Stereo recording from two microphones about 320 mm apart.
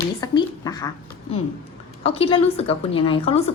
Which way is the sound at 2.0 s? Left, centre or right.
Centre.